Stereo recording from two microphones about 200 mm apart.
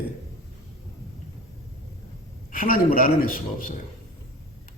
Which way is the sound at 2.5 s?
45° left (ahead or behind).